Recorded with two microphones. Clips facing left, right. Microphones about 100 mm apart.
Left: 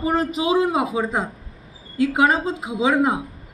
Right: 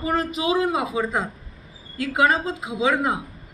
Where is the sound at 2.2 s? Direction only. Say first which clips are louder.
Right 1 dB; 20° left (ahead or behind).